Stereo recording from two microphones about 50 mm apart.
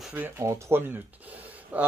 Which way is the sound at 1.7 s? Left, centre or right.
Right.